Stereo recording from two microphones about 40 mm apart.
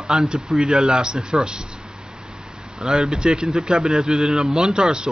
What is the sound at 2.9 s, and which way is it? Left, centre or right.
Speech, centre.